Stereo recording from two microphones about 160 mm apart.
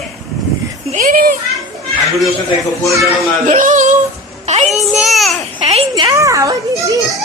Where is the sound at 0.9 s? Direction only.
60° right (ahead or behind).